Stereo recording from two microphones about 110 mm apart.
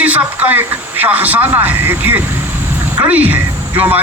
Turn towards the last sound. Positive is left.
turn(degrees=-15)  # may be behind; listen again after turning